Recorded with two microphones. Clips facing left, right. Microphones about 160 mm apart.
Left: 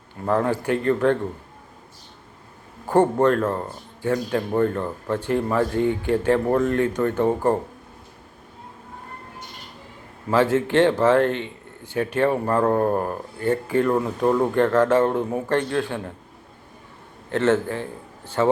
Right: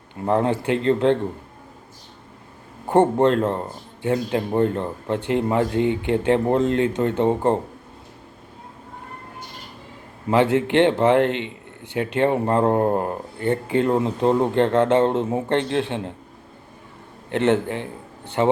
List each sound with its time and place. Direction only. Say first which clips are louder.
0.3 s speech: right 1 dB; 20° right (ahead or behind)
2.8 s speech: right 1 dB; 20° right (ahead or behind)
10.2 s speech: right 1 dB; 20° right (ahead or behind)
17.3 s speech: right 1 dB; 20° right (ahead or behind)